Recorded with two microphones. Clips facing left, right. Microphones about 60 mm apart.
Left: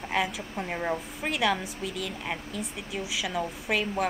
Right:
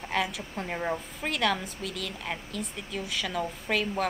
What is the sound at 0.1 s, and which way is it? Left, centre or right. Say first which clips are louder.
A woman's voice: left 1 dB; centre.